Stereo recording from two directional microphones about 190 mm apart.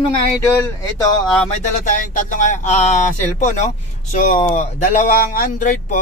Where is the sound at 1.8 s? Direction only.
40° left (ahead or behind).